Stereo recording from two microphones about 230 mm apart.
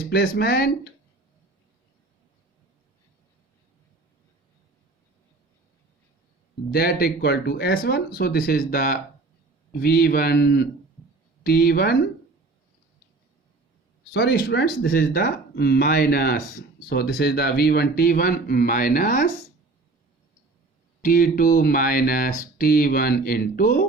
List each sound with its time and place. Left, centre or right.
0.1 s speech: left
6.7 s speech: left
14.1 s speech: left
21.0 s speech: left